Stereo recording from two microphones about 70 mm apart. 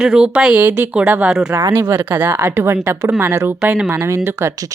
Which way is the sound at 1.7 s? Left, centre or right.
Right.